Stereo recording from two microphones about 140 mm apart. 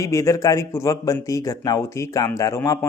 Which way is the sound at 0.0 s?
20° left (ahead or behind).